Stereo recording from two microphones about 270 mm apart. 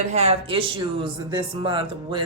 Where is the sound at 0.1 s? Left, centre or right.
Right.